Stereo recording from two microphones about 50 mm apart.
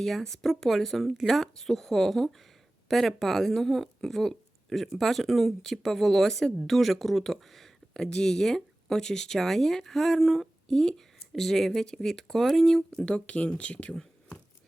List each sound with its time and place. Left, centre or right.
0.0 s speech: centre
13.1 s speech: left